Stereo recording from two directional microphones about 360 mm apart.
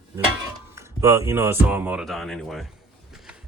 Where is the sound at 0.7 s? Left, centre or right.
Centre.